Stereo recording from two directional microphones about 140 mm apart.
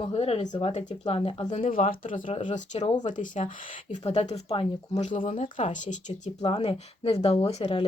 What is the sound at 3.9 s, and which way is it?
Speech, 50° left (ahead or behind).